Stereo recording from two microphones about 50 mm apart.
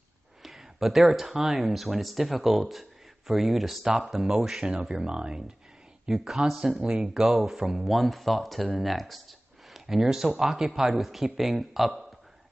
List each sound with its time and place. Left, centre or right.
0.4 s speech: centre
6.0 s speech: centre
7.2 s speech: centre